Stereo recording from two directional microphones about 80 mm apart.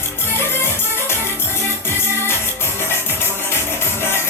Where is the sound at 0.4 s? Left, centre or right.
Left.